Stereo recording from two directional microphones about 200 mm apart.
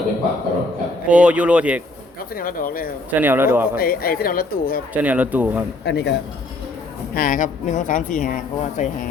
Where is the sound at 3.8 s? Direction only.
50° left (ahead or behind).